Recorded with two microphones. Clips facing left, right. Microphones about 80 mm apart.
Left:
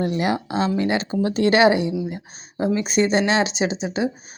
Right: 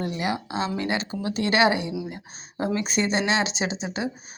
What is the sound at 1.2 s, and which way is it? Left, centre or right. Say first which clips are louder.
Speech: left 6 dB; left.